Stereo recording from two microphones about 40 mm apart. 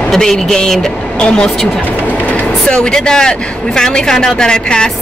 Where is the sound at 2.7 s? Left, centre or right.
Centre.